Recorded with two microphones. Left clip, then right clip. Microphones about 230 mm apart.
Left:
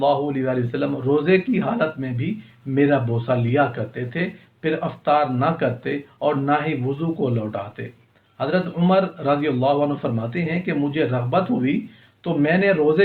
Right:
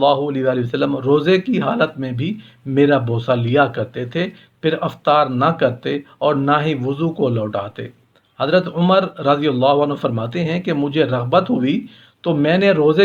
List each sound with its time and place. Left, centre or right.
0.0 s speech: right